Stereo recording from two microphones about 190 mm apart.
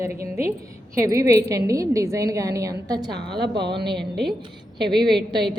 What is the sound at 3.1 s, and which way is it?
Speech, 60° right (ahead or behind).